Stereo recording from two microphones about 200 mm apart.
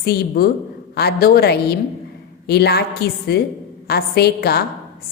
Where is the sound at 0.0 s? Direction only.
50° left (ahead or behind).